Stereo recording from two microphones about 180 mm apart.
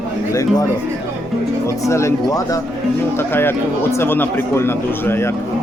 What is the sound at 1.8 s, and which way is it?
Speech, 15° left (ahead or behind).